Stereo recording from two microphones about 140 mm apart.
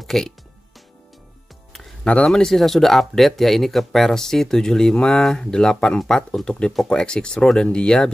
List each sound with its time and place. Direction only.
0.0 s music: centre (ahead or behind)
1.7 s speech: 5° left (ahead or behind)